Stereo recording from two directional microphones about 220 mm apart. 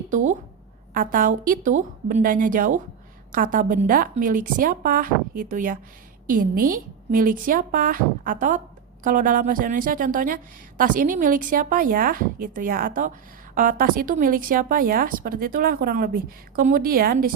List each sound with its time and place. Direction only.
0.1 s a woman's voice: 35° right (ahead or behind)